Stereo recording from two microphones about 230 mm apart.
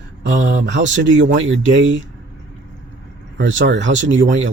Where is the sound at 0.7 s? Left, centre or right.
Right.